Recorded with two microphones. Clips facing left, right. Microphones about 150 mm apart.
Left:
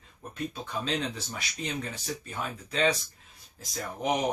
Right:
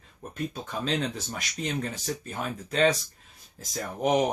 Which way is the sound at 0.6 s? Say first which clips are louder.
Right 2 dB; 45° right (ahead or behind).